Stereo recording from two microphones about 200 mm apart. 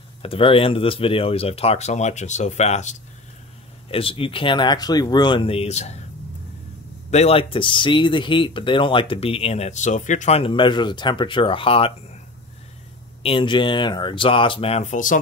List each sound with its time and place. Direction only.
0.2 s speech: 25° left (ahead or behind)
7.1 s speech: 30° left (ahead or behind)
13.2 s speech: 25° left (ahead or behind)